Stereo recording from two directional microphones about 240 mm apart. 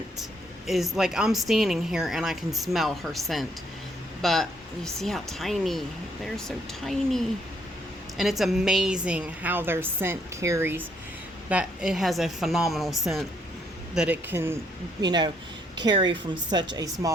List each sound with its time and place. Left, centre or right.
0.7 s a woman's voice: centre
6.8 s a woman's voice: centre